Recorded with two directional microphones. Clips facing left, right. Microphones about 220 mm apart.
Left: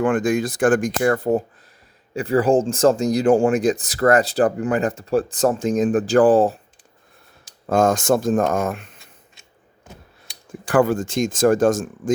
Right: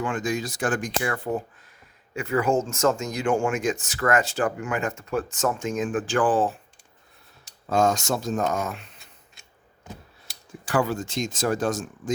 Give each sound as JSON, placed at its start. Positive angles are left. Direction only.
{"t": 0.0, "sound": "speech", "side_deg": 55}
{"t": 7.7, "sound": "speech", "side_deg": 50}
{"t": 10.7, "sound": "speech", "side_deg": 50}